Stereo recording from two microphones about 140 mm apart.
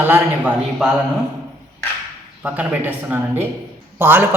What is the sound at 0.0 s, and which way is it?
Speech, 15° right (ahead or behind).